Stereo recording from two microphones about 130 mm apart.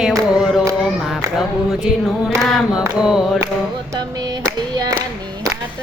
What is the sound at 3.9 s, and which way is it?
Clapping, 30° right (ahead or behind).